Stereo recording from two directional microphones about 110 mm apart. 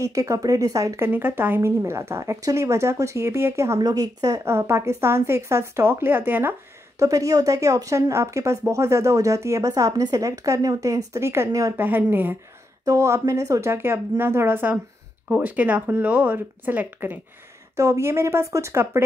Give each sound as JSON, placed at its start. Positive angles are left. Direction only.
{"t": 0.0, "sound": "a woman's voice", "side_deg": -30}
{"t": 7.0, "sound": "a woman's voice", "side_deg": -30}
{"t": 12.8, "sound": "a woman's voice", "side_deg": -30}